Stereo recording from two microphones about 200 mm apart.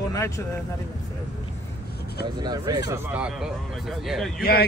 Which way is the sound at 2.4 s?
20° right (ahead or behind).